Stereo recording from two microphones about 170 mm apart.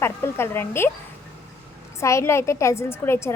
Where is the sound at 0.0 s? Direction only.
15° left (ahead or behind).